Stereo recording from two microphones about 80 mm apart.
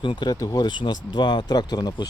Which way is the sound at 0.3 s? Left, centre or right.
Left.